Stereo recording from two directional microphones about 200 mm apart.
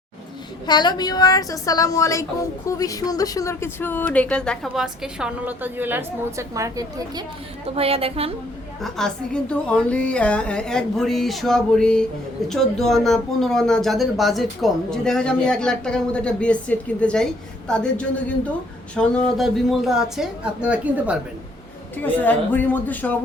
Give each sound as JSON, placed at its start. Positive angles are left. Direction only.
{"t": 0.7, "sound": "a woman's voice", "side_deg": 20}
{"t": 7.8, "sound": "a woman's voice", "side_deg": -30}
{"t": 8.8, "sound": "speech", "side_deg": 5}
{"t": 21.9, "sound": "a woman's voice", "side_deg": 10}